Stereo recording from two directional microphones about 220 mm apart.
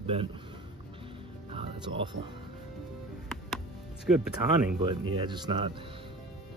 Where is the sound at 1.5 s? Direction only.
20° right (ahead or behind).